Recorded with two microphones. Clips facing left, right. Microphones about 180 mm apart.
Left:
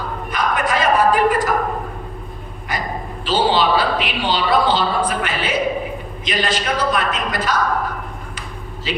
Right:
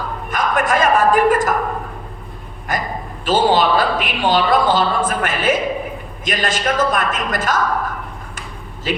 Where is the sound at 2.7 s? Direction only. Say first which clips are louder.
Right 3 dB; 50° right (ahead or behind).